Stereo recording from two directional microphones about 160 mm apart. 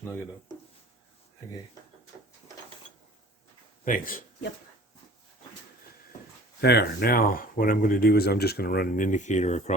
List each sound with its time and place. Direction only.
3.8 s speech: 60° left (ahead or behind)
6.6 s speech: 90° left; by 9.7 s 45° left (ahead or behind)